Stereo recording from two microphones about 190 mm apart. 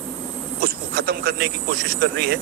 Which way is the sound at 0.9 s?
55° right (ahead or behind).